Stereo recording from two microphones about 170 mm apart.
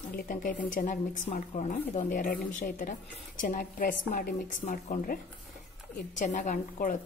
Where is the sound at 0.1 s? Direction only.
50° left (ahead or behind).